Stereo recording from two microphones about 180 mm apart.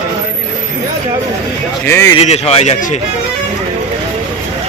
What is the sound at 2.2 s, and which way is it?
Speech, 35° left (ahead or behind).